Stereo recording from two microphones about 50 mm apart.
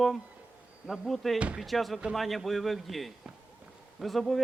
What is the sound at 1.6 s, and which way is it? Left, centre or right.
Speech, centre.